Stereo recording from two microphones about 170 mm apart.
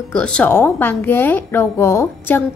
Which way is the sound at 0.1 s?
5° left (ahead or behind).